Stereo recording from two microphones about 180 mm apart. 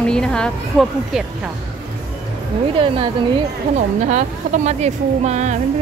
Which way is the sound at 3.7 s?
40° right (ahead or behind).